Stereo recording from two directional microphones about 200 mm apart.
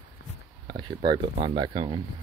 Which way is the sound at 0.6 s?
20° right (ahead or behind).